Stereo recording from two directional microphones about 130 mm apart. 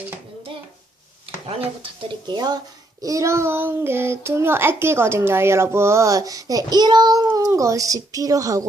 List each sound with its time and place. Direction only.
1.5 s a child's voice: 45° right (ahead or behind); by 8.6 s 25° right (ahead or behind)